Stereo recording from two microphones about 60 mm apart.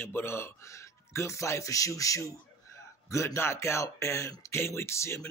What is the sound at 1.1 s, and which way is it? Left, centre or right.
Speech, left.